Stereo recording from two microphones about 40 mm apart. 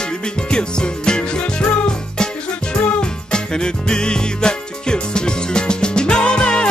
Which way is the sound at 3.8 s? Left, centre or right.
Left.